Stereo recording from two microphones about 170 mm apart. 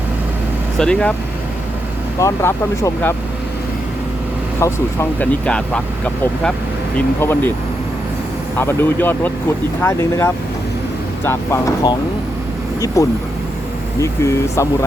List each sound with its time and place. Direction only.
0.8 s speech: 5° left (ahead or behind)
2.1 s speech: 15° left (ahead or behind)
4.6 s speech: 15° left (ahead or behind)
5.5 s speech: 5° left (ahead or behind)
6.9 s speech: 10° left (ahead or behind)
8.5 s speech: 10° left (ahead or behind)
13.0 s speech: 20° left (ahead or behind)